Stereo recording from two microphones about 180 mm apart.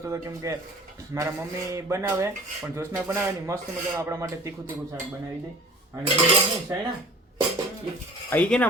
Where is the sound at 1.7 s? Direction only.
15° right (ahead or behind).